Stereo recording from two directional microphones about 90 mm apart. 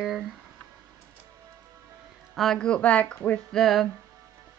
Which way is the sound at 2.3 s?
5° left (ahead or behind).